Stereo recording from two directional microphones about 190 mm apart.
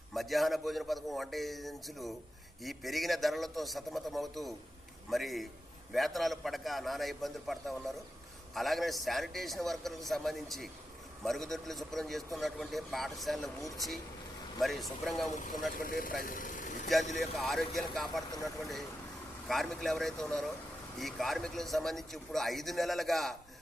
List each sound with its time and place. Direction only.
0.1 s a man's voice: centre (ahead or behind)
15.3 s speech: 45° left (ahead or behind)
16.2 s vehicle: 45° left (ahead or behind)
17.2 s a man's voice: centre (ahead or behind)
19.5 s a man's voice: centre (ahead or behind)